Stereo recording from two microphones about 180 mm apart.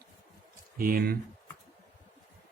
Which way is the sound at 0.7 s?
55° right (ahead or behind).